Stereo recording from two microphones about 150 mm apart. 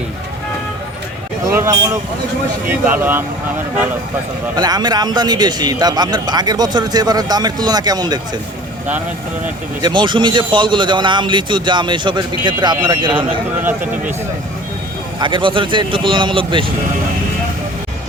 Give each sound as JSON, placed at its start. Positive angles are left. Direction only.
{"t": 1.5, "sound": "a man's voice", "side_deg": -15}
{"t": 4.5, "sound": "a man's voice", "side_deg": -25}
{"t": 9.8, "sound": "a man's voice", "side_deg": -30}
{"t": 13.1, "sound": "speech", "side_deg": -10}
{"t": 15.2, "sound": "a man's voice", "side_deg": -35}